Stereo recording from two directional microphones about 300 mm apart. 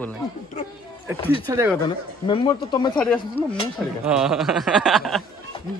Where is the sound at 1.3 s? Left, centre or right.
Centre.